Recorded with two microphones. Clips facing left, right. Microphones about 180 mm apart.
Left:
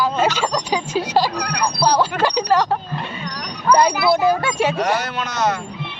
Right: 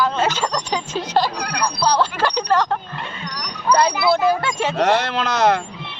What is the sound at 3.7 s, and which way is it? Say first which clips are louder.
Speech: left 1 dB; 10° left (ahead or behind).